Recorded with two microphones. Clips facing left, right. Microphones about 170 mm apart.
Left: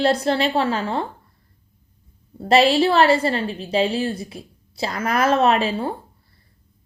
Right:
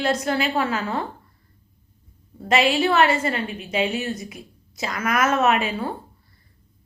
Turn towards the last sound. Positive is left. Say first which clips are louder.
# left 2 dB
turn(degrees=30)  # may be behind; listen again after turning